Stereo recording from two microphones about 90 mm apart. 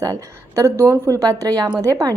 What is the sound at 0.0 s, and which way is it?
A woman's voice, 40° right (ahead or behind).